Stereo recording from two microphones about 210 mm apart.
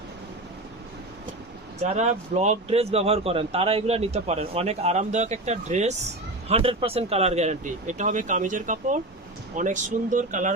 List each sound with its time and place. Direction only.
1.8 s speech: 35° right (ahead or behind)